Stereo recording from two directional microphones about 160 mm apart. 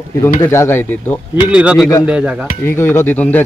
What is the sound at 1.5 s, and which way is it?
Speech, 5° right (ahead or behind).